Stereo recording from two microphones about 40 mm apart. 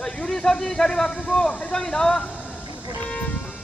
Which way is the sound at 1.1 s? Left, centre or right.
Left.